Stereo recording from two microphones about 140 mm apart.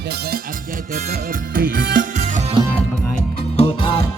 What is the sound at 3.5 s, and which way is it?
Music, 45° left (ahead or behind).